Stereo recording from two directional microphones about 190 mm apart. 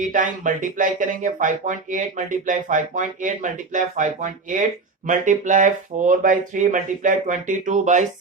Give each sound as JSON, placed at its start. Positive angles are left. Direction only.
{"t": 0.1, "sound": "speech", "side_deg": -45}